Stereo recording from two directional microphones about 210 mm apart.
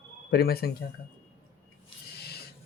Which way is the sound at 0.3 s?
45° left (ahead or behind).